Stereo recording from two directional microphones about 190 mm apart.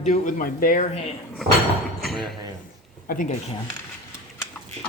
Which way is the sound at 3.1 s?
45° left (ahead or behind).